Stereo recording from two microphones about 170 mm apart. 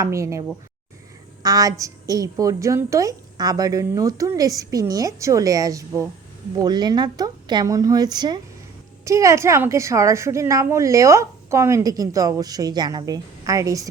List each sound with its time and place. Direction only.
0.0 s a woman's voice: 15° right (ahead or behind)